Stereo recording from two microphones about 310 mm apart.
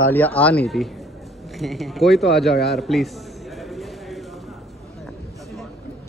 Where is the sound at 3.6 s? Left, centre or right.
Centre.